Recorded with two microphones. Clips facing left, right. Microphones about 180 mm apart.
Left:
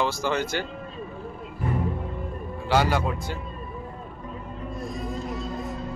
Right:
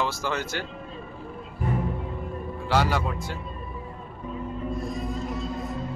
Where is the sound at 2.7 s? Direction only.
Centre (ahead or behind).